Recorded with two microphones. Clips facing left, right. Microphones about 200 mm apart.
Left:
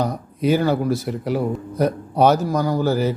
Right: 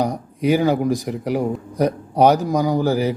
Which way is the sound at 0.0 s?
15° right (ahead or behind).